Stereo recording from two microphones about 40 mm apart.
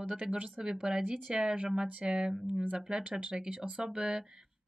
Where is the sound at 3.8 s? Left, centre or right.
Centre.